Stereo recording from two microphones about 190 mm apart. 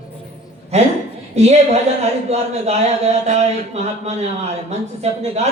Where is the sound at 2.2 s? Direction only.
35° right (ahead or behind).